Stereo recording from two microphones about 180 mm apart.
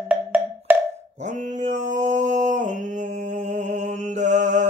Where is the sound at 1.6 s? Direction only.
40° right (ahead or behind).